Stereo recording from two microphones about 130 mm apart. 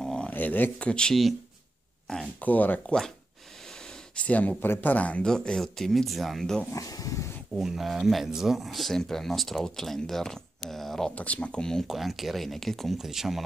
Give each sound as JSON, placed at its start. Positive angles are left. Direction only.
{"t": 0.0, "sound": "speech", "side_deg": 5}
{"t": 4.1, "sound": "speech", "side_deg": 10}
{"t": 6.7, "sound": "a sound", "side_deg": 25}
{"t": 7.5, "sound": "speech", "side_deg": 0}